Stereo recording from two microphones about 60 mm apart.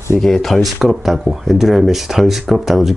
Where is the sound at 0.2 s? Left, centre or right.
Centre.